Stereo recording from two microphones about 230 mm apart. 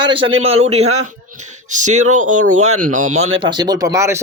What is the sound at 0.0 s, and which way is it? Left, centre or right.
Speech, right.